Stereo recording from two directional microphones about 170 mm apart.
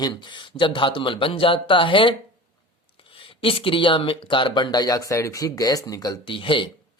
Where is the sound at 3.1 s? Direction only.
30° left (ahead or behind).